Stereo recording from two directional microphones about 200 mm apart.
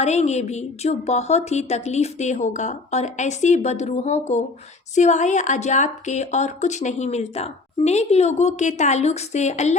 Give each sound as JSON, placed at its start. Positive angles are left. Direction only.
{"t": 0.0, "sound": "speech", "side_deg": 35}